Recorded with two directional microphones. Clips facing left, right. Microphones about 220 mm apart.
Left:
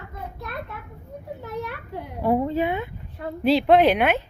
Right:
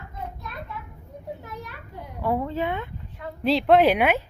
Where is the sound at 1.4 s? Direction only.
70° left (ahead or behind).